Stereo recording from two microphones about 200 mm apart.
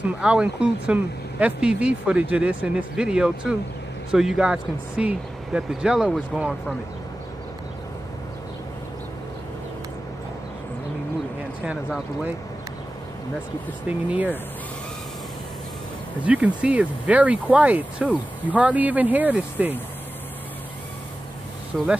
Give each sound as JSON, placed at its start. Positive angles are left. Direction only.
{"t": 0.2, "sound": "speech", "side_deg": -5}
{"t": 11.6, "sound": "speech", "side_deg": -5}
{"t": 13.8, "sound": "speech", "side_deg": -5}
{"t": 16.3, "sound": "speech", "side_deg": -5}
{"t": 21.7, "sound": "speech", "side_deg": -5}